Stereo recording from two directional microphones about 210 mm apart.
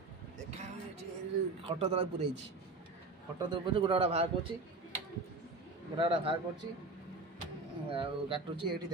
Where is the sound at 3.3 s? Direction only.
20° right (ahead or behind).